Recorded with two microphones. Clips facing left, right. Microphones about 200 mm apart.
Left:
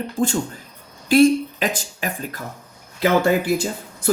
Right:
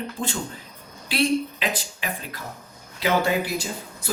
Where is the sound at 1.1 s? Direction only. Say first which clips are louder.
Left 9 dB; 45° left (ahead or behind).